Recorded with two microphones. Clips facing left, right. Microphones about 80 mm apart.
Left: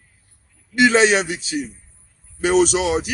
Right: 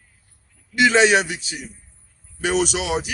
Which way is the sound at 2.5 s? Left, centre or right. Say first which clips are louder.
Left 6 dB; left.